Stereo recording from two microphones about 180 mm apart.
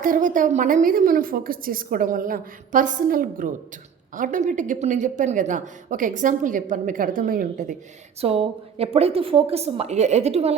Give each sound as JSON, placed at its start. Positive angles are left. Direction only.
{"t": 0.0, "sound": "a woman's voice", "side_deg": -50}
{"t": 8.2, "sound": "a woman's voice", "side_deg": -35}